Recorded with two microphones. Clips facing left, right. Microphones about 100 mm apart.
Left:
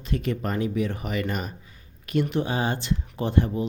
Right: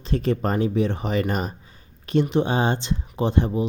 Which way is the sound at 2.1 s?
25° right (ahead or behind).